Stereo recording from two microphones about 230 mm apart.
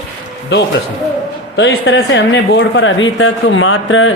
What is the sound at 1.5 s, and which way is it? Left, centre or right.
Speech, left.